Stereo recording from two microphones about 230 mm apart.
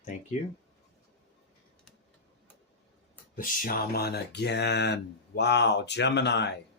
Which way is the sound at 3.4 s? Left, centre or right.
Left.